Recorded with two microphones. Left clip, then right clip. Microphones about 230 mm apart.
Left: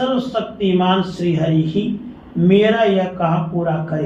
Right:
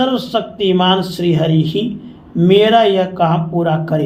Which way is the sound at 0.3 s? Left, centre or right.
Right.